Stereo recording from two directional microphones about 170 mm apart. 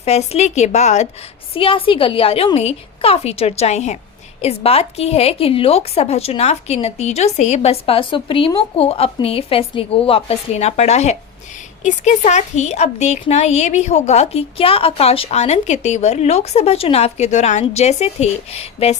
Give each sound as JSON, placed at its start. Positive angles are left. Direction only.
{"t": 0.0, "sound": "speech", "side_deg": 40}